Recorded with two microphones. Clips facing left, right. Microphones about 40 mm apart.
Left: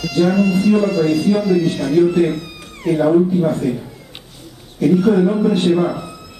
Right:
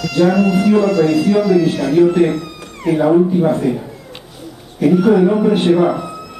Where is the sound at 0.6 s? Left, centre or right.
Right.